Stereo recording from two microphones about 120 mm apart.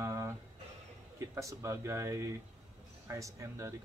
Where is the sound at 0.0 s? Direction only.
25° right (ahead or behind).